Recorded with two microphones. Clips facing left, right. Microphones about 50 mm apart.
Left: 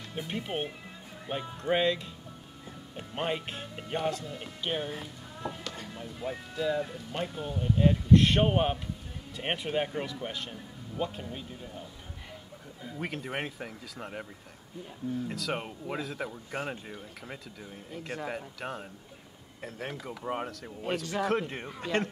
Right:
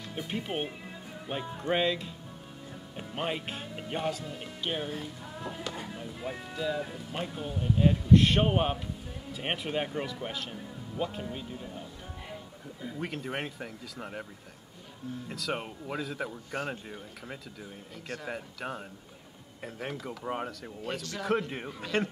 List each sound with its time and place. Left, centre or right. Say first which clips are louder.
0.1 s speech: even; centre
12.8 s speech: right 1 dB; centre
15.2 s speech: left 1 dB; centre
17.9 s speech: left 3 dB; centre
18.2 s speech: right 1 dB; centre